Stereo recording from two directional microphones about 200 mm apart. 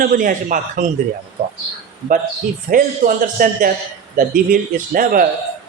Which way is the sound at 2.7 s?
45° right (ahead or behind).